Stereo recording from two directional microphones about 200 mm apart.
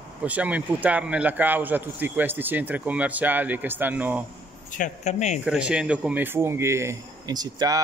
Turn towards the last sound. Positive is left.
turn(degrees=-20)  # may be behind; listen again after turning